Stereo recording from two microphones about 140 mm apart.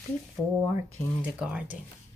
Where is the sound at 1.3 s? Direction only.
10° right (ahead or behind).